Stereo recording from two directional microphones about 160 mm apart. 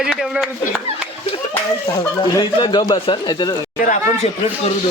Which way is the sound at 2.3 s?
30° left (ahead or behind).